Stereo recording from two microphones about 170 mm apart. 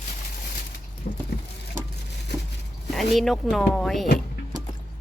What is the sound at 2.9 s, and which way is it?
Speech, centre (ahead or behind).